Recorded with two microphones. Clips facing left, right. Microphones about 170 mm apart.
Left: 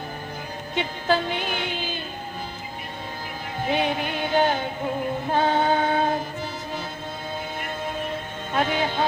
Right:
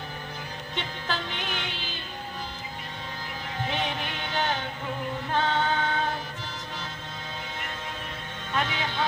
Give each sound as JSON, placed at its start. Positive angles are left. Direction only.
{"t": 0.8, "sound": "speech", "side_deg": 50}
{"t": 3.7, "sound": "music", "side_deg": 45}
{"t": 8.5, "sound": "speech", "side_deg": 45}